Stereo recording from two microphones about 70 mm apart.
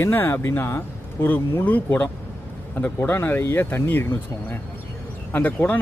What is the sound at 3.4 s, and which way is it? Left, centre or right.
Speech, left.